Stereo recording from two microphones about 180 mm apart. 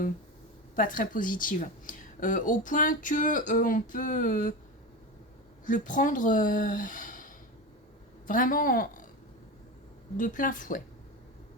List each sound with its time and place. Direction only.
0.8 s speech: 50° left (ahead or behind)
5.6 s speech: 45° left (ahead or behind)
10.2 s speech: 45° left (ahead or behind)